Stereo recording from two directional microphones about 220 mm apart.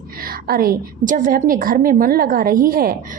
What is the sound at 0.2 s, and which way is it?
A woman's voice, 40° right (ahead or behind).